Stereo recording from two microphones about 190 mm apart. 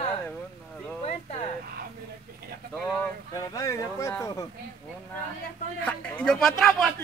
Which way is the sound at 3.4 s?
15° left (ahead or behind).